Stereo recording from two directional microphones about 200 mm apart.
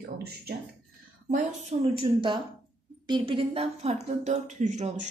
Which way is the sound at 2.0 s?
25° right (ahead or behind).